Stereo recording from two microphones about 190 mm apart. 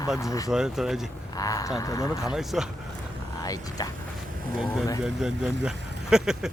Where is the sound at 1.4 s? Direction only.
20° left (ahead or behind).